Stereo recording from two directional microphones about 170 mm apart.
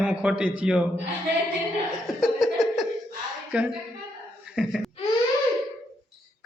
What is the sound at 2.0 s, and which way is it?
Chuckle, centre (ahead or behind).